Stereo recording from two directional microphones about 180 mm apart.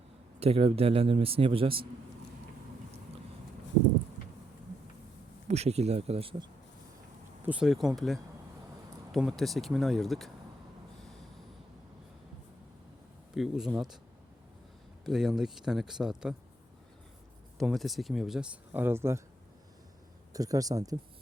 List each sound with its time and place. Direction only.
0.3 s a man's voice: 35° right (ahead or behind)
5.5 s a man's voice: 35° right (ahead or behind)
7.4 s speech: 5° right (ahead or behind)
13.3 s speech: centre (ahead or behind)
15.0 s speech: centre (ahead or behind)
17.6 s speech: centre (ahead or behind)
20.3 s speech: 20° right (ahead or behind)